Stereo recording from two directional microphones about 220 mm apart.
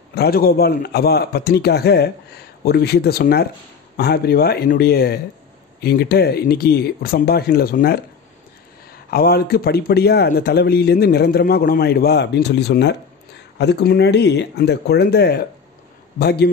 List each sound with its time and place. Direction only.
0.1 s speech: 45° left (ahead or behind)
9.1 s speech: 45° left (ahead or behind)